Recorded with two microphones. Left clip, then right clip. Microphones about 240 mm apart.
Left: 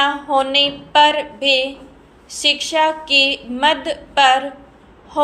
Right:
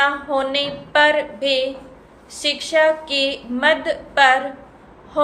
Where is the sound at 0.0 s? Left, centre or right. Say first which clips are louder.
Left 2 dB; centre.